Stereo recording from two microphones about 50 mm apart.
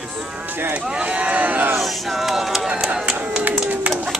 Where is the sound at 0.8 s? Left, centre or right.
Right.